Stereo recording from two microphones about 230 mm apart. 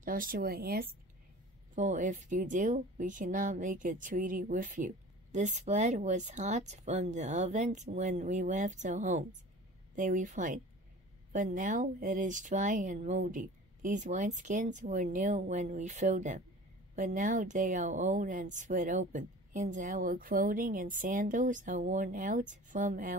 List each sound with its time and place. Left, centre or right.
0.0 s speech: right